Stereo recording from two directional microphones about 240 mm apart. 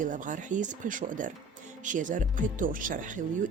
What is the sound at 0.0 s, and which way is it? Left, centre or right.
A woman's voice, right.